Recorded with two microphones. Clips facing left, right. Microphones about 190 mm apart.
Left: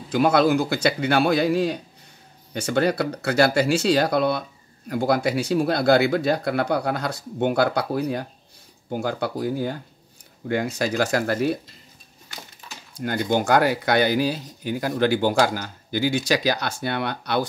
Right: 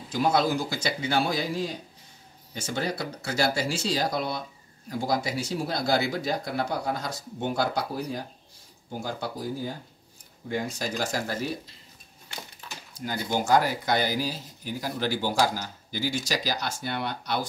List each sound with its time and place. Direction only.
0.1 s speech: 65° left (ahead or behind)
13.0 s speech: 60° left (ahead or behind)